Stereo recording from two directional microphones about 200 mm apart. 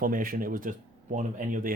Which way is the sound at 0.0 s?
45° right (ahead or behind).